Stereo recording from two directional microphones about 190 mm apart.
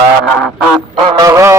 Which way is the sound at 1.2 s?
15° right (ahead or behind).